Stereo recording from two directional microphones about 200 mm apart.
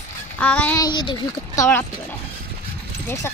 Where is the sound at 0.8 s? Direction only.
20° left (ahead or behind).